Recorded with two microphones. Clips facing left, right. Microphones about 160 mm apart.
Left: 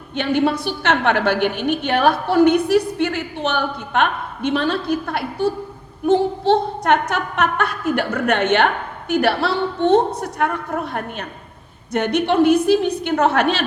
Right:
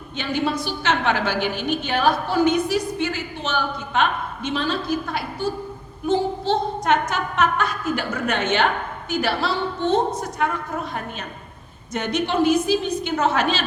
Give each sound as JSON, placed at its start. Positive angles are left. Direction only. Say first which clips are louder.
{"t": 0.2, "sound": "a woman's voice", "louder": "left 5 dB", "side_deg": 60}